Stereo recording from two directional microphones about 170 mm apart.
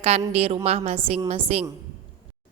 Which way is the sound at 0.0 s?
40° right (ahead or behind).